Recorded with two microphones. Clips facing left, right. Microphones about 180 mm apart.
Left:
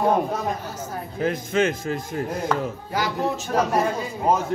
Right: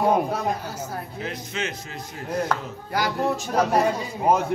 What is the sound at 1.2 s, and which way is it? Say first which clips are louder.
A man's voice: left 11 dB; 50° left (ahead or behind).